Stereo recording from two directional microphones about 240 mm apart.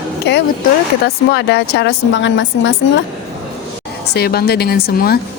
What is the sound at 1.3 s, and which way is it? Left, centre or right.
Speech, left.